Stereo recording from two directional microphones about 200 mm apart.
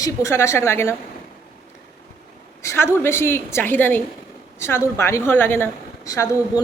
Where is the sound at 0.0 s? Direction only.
15° left (ahead or behind).